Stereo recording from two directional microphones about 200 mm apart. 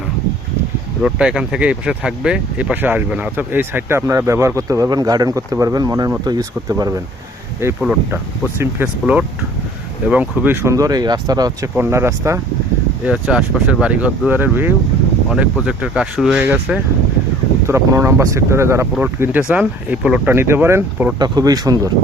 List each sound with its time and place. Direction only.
1.0 s speech: 5° right (ahead or behind)